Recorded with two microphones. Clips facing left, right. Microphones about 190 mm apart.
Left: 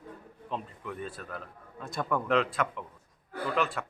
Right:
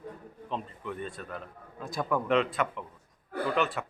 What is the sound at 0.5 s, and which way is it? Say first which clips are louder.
Speech: right 1 dB; centre (ahead or behind).